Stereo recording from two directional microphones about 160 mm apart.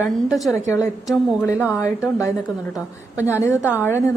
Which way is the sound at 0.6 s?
20° left (ahead or behind).